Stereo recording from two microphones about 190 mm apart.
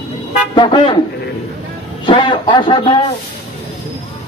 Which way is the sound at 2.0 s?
25° left (ahead or behind).